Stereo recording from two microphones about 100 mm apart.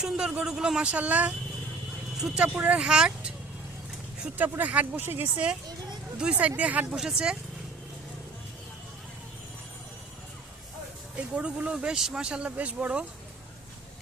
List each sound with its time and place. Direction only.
0.0 s speech: 5° right (ahead or behind)
11.3 s speech: 10° right (ahead or behind)